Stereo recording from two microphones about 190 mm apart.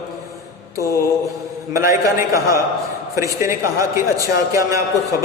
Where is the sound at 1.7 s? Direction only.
15° right (ahead or behind).